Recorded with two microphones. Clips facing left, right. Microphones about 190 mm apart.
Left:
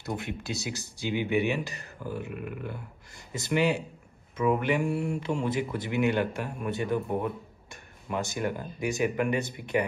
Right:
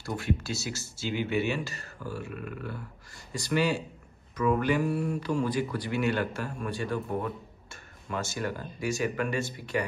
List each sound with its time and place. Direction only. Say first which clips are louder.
0.0 s a man's voice: right 3 dB; 20° left (ahead or behind)